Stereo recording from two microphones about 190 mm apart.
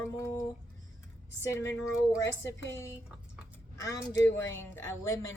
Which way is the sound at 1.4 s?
15° left (ahead or behind).